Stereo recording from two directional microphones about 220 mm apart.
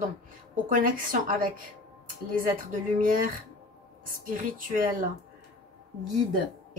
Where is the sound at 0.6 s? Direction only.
40° right (ahead or behind).